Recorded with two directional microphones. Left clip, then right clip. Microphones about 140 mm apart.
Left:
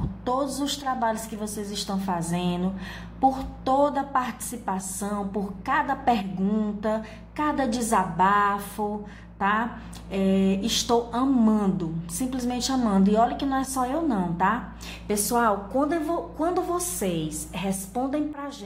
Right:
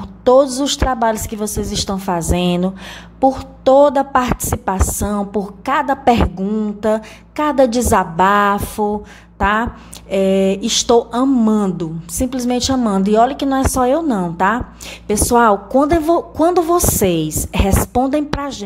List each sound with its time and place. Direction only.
0.2 s a woman's voice: 55° right (ahead or behind)
3.2 s a woman's voice: 55° right (ahead or behind)
6.4 s a sound: 40° right (ahead or behind)
6.8 s a woman's voice: 60° right (ahead or behind)